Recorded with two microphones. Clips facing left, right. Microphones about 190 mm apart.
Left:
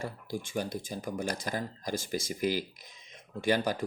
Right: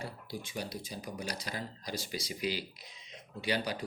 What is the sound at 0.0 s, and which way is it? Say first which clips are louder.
Speech: left 5 dB; 45° left (ahead or behind).